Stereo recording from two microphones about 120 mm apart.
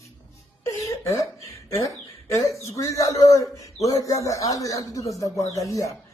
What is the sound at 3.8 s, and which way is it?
A man's voice, 30° left (ahead or behind).